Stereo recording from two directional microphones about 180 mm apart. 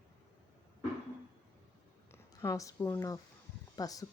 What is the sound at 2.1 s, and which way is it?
Speech, 15° left (ahead or behind).